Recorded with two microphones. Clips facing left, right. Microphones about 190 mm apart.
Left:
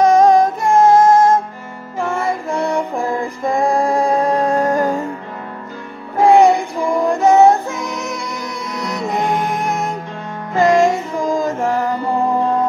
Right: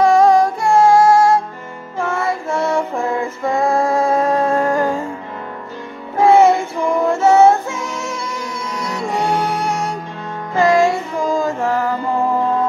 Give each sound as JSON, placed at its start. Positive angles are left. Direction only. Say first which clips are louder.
{"t": 0.0, "sound": "music", "louder": "left 1 dB", "side_deg": 20}
{"t": 2.0, "sound": "child singing", "louder": "even", "side_deg": 15}
{"t": 3.2, "sound": "music", "louder": "left 1 dB", "side_deg": 15}
{"t": 6.2, "sound": "music", "louder": "left 1 dB", "side_deg": 15}
{"t": 10.6, "sound": "child singing", "louder": "left 1 dB", "side_deg": 15}
{"t": 11.6, "sound": "mantra", "louder": "even", "side_deg": 20}